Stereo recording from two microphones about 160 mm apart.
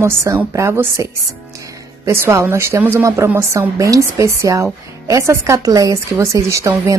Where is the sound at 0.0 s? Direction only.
15° right (ahead or behind).